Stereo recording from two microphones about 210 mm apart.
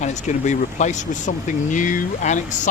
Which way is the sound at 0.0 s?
35° left (ahead or behind).